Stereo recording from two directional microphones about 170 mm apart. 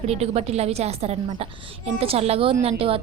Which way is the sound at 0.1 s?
40° right (ahead or behind).